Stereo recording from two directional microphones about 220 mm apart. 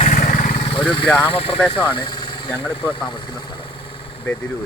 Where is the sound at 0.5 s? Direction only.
25° left (ahead or behind).